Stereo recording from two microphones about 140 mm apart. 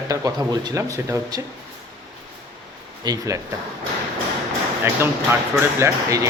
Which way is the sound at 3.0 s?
25° right (ahead or behind).